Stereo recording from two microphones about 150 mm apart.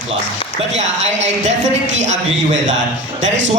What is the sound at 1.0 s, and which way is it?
Speech, 50° right (ahead or behind).